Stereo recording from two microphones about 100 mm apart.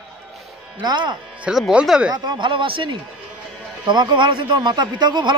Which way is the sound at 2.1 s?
50° right (ahead or behind).